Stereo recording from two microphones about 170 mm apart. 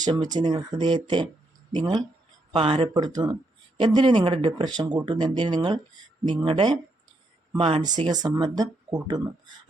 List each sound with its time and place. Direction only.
0.0 s speech: 25° right (ahead or behind)